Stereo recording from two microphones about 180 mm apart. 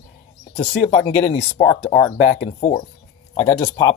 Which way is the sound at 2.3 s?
35° left (ahead or behind).